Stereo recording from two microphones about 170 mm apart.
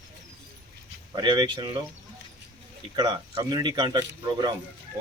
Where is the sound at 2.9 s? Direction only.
25° right (ahead or behind).